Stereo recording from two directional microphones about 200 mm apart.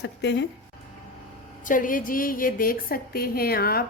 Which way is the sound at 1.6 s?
40° left (ahead or behind).